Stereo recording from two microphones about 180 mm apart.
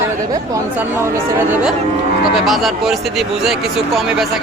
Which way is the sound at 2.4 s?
Centre (ahead or behind).